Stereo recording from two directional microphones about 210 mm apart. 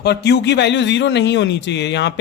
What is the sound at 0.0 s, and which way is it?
A man's voice, 50° left (ahead or behind).